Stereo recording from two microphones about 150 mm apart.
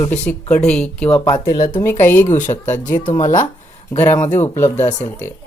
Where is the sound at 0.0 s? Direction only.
15° left (ahead or behind).